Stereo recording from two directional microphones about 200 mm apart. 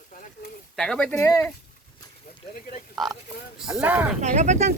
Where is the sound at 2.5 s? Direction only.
45° left (ahead or behind).